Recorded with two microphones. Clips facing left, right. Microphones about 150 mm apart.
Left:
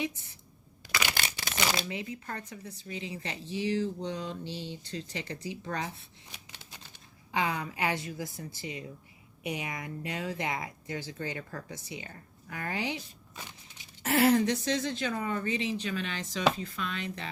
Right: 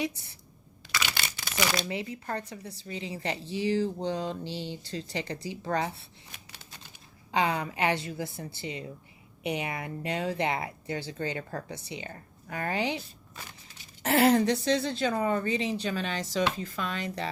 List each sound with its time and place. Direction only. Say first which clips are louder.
1.9 s a woman's voice: right 4 dB; 35° right (ahead or behind)
7.3 s a woman's voice: right 4 dB; 30° right (ahead or behind)
14.0 s a woman's voice: right 2 dB; 30° right (ahead or behind)